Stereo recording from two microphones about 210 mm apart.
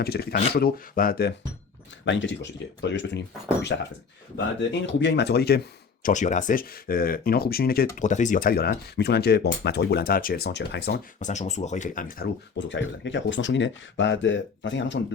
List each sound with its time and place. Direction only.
0.0 s speech: 50° left (ahead or behind)
2.0 s speech: 60° left (ahead or behind)
4.9 s speech: 55° left (ahead or behind)
11.2 s speech: 35° left (ahead or behind)
12.5 s speech: 60° left (ahead or behind)